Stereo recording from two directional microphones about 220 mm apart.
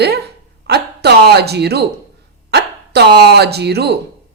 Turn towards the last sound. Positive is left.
turn(degrees=-50)  # may be behind; listen again after turning